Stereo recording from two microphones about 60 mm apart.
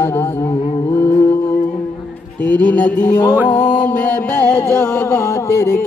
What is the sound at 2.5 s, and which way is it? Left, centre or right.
Music, left.